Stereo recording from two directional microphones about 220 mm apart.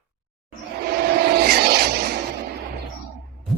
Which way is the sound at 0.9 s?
45° right (ahead or behind).